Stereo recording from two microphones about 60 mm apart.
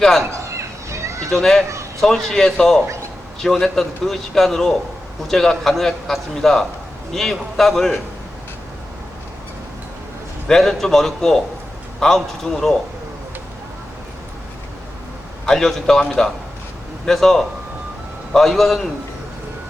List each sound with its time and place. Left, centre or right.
0.5 s children playing: right
1.3 s a man's voice: centre
10.5 s a man's voice: centre
15.4 s a man's voice: centre